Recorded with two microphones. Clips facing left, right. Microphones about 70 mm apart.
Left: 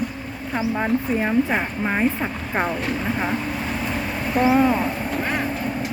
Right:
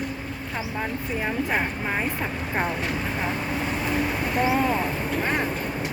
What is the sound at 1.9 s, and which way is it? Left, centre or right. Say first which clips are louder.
Speech: left 5 dB; centre.